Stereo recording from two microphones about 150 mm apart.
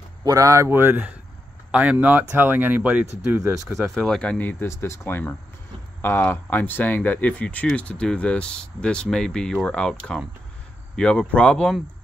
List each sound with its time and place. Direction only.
0.2 s speech: 25° right (ahead or behind)
3.9 s speech: centre (ahead or behind)